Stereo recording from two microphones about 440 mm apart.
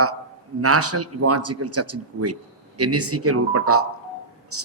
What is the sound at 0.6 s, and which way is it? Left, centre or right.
A man's voice, right.